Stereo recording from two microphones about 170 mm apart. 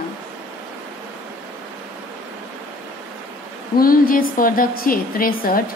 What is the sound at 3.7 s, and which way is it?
A woman's voice, 60° left (ahead or behind).